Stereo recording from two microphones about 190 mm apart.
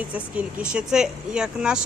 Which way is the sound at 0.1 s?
5° right (ahead or behind).